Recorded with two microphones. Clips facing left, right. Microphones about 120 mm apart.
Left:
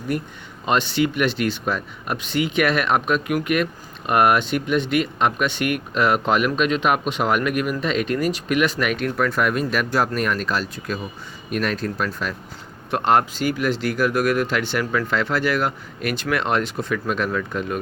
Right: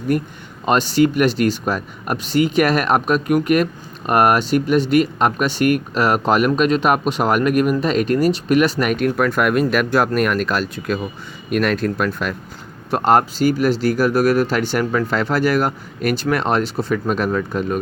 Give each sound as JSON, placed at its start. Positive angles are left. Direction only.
{"t": 0.1, "sound": "speech", "side_deg": -45}
{"t": 12.9, "sound": "speech", "side_deg": -40}